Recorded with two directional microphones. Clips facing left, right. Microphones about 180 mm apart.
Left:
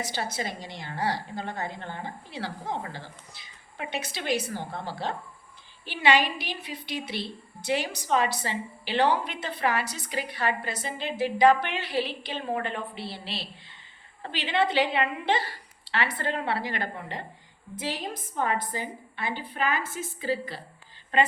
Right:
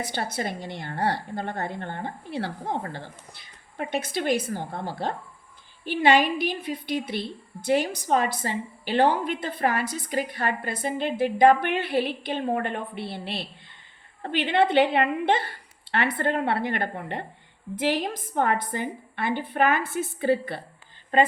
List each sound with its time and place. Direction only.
0.0 s a woman's voice: 55° right (ahead or behind)